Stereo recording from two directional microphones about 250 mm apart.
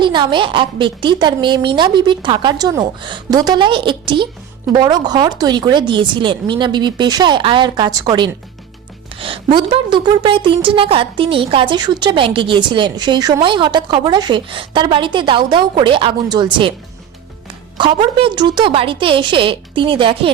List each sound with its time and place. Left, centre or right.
0.0 s a woman's voice: centre
17.7 s a woman's voice: centre